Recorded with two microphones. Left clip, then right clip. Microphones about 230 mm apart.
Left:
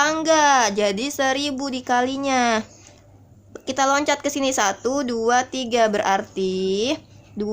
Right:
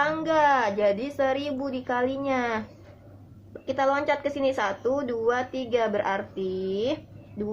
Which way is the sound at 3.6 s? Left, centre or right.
Left.